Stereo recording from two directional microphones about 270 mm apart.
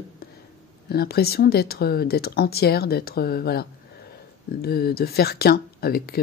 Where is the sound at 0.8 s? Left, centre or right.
Left.